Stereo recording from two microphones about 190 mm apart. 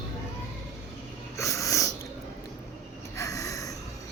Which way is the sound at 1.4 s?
15° left (ahead or behind).